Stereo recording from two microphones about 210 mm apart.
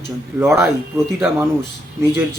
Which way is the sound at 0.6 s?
15° right (ahead or behind).